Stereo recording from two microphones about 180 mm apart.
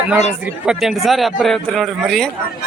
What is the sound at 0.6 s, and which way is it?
Speech, centre (ahead or behind).